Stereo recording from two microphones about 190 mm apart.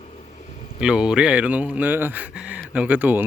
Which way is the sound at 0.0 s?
35° left (ahead or behind).